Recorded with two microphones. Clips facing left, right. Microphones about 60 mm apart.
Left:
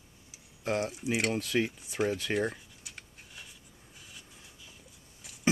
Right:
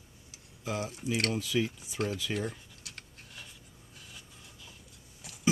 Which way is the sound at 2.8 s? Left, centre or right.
Centre.